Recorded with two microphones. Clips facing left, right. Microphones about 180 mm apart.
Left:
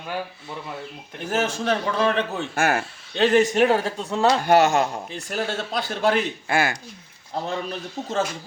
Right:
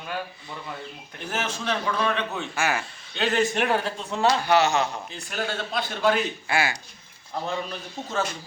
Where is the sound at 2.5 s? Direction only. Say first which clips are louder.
Left 5 dB; 55° left (ahead or behind).